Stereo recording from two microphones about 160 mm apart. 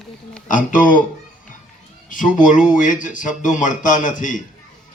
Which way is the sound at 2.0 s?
55° left (ahead or behind).